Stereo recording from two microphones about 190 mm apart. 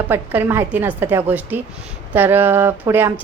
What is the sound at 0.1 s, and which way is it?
Speech, 10° right (ahead or behind).